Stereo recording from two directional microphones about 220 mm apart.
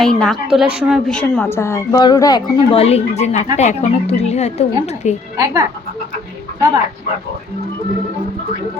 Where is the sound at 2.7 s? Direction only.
30° left (ahead or behind).